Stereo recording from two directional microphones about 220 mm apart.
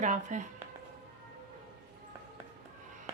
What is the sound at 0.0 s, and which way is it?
Speech, 35° right (ahead or behind).